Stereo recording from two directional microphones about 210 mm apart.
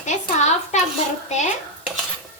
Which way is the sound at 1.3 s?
35° left (ahead or behind).